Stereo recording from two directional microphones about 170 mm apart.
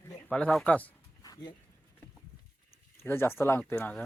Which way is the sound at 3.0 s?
15° left (ahead or behind).